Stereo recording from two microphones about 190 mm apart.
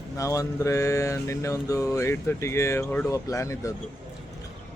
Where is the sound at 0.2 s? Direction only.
15° left (ahead or behind).